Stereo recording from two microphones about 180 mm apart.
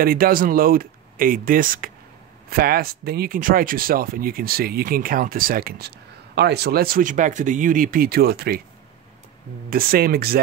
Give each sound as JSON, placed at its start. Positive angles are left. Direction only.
{"t": 0.0, "sound": "speech", "side_deg": -55}
{"t": 9.7, "sound": "speech", "side_deg": -55}